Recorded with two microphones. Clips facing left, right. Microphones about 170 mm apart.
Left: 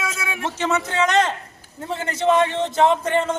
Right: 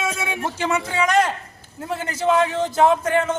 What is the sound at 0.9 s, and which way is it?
A man's voice, 10° right (ahead or behind).